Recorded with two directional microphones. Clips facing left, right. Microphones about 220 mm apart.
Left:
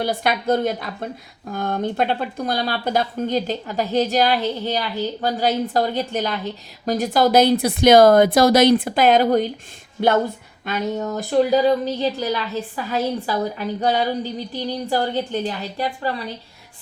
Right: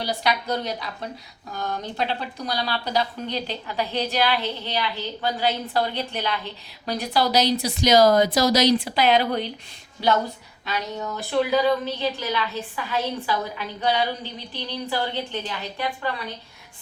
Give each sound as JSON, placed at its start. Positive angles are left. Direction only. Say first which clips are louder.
{"t": 0.0, "sound": "speech", "louder": "left 4 dB", "side_deg": 50}